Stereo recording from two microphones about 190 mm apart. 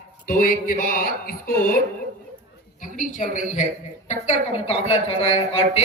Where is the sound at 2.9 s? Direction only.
45° left (ahead or behind).